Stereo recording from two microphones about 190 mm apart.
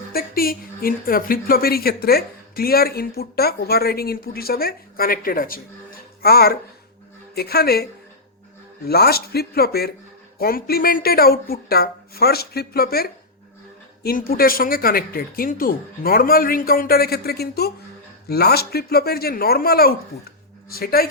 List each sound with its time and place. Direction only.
0.1 s a woman's voice: 50° left (ahead or behind)
8.9 s a woman's voice: 55° left (ahead or behind)